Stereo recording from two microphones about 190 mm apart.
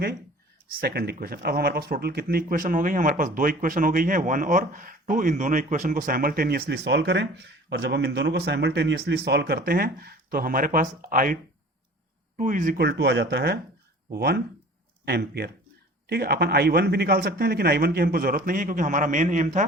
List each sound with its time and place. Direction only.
0.8 s speech: 55° right (ahead or behind)
12.4 s speech: 45° right (ahead or behind)